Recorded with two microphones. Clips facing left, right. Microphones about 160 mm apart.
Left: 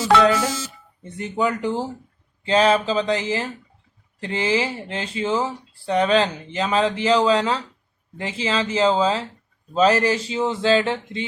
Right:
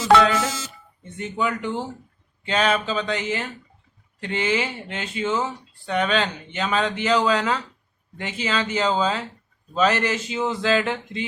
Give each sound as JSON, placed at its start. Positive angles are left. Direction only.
{"t": 0.0, "sound": "a man's voice", "side_deg": 35}